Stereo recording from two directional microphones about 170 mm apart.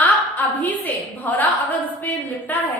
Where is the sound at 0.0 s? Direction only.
10° left (ahead or behind).